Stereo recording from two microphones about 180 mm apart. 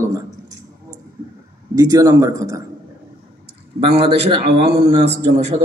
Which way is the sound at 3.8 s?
35° right (ahead or behind).